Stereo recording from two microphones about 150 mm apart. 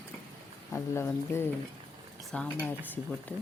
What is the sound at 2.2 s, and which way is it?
Speech, 5° left (ahead or behind).